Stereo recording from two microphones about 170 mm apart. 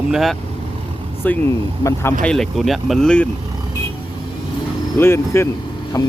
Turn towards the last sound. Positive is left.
turn(degrees=20)  # may be behind; listen again after turning